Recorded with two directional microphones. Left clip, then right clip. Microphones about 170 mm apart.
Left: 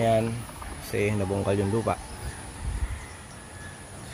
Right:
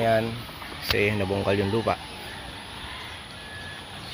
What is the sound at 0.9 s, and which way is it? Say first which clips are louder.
Speech: right 3 dB; 5° left (ahead or behind).